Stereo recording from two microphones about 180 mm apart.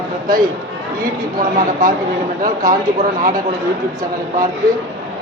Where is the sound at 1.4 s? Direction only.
50° right (ahead or behind).